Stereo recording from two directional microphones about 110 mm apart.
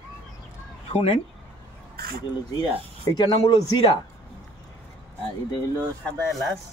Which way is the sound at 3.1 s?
40° left (ahead or behind).